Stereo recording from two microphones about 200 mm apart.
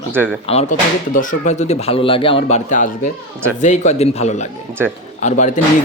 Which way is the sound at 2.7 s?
40° left (ahead or behind).